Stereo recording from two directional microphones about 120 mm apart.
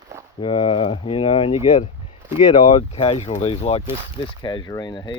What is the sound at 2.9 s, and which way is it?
Speech, 50° left (ahead or behind).